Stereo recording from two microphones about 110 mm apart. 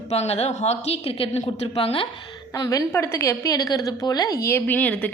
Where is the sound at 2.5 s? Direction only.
30° left (ahead or behind).